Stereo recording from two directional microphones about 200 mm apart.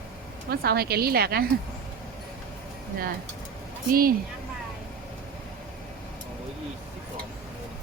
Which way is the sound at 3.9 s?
45° right (ahead or behind).